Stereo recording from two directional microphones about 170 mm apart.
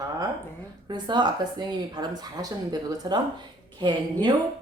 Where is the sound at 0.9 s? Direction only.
25° right (ahead or behind).